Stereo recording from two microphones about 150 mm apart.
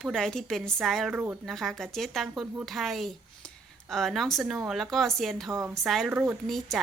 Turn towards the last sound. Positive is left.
turn(degrees=0)  # may be behind; listen again after turning